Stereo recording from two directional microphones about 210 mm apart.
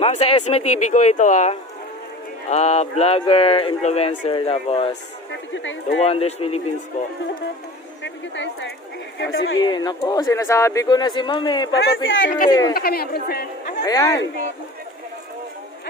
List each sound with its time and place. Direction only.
0.0 s speech: 30° left (ahead or behind)
5.3 s speech: 65° left (ahead or behind)
6.0 s speech: 30° left (ahead or behind)
8.0 s a woman's voice: 60° left (ahead or behind)
9.6 s speech: 20° left (ahead or behind)
11.7 s a man's voice: 65° left (ahead or behind)
12.4 s speech: 20° left (ahead or behind)
12.7 s a woman's voice: 45° left (ahead or behind)
13.8 s speech: 15° left (ahead or behind)